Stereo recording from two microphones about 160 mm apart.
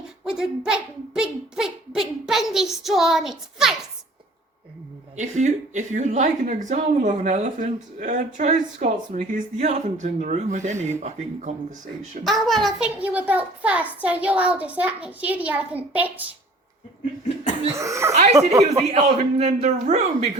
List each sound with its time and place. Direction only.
0.3 s a woman's voice: 5° right (ahead or behind)
5.1 s speech: 50° right (ahead or behind)
12.2 s a woman's voice: centre (ahead or behind)
13.0 s a child's voice: 10° right (ahead or behind)
17.7 s speech: 20° right (ahead or behind)
18.1 s a man's voice: 40° right (ahead or behind)